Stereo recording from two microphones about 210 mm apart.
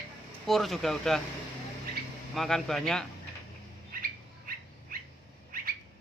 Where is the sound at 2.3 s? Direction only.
Centre (ahead or behind).